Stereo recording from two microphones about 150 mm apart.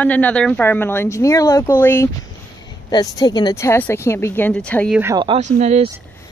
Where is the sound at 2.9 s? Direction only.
25° left (ahead or behind); by 4.9 s 10° left (ahead or behind).